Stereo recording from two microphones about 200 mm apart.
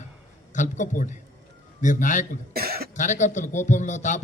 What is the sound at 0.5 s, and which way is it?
A man's voice, 35° left (ahead or behind).